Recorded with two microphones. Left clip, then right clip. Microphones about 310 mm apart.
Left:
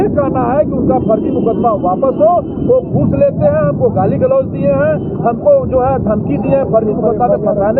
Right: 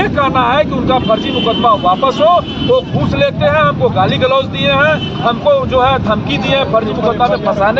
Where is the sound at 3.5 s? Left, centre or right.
Centre.